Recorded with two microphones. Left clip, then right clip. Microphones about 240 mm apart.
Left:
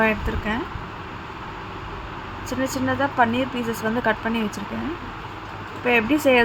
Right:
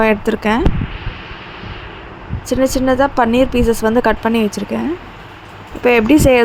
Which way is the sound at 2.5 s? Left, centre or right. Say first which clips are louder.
Right 11 dB; right.